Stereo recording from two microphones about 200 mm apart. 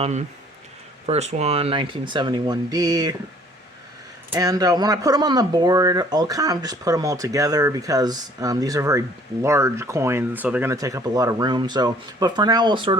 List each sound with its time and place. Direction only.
0.0 s speech: 35° right (ahead or behind); by 3.2 s 20° right (ahead or behind)
4.3 s speech: 20° right (ahead or behind)